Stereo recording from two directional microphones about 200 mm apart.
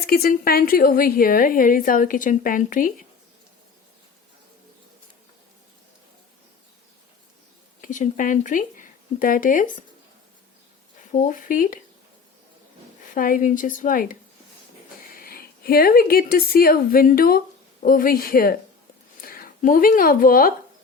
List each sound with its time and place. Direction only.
0.0 s a woman's voice: 50° left (ahead or behind)
7.8 s speech: 40° left (ahead or behind)
11.1 s a woman's voice: 40° left (ahead or behind)
13.1 s a woman's voice: 45° left (ahead or behind)